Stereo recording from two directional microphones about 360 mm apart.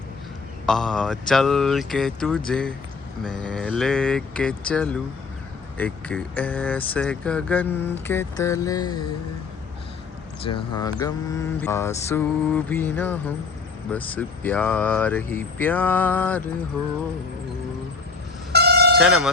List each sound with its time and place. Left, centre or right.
0.6 s speech: centre
8.0 s mantra: centre
10.4 s mantra: centre
13.9 s speech: centre
18.5 s a sound: right
18.9 s speech: centre